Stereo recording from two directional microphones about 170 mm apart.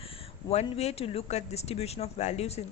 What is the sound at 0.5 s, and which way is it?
Speech, 40° left (ahead or behind).